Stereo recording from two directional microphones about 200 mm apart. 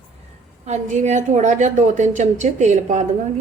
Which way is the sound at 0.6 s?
35° right (ahead or behind).